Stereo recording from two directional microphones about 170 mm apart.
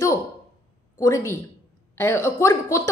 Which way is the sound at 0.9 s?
20° left (ahead or behind).